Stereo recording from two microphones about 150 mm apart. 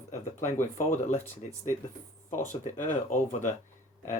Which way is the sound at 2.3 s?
55° left (ahead or behind).